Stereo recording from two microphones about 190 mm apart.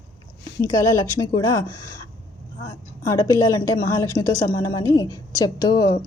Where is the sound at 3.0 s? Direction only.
15° left (ahead or behind).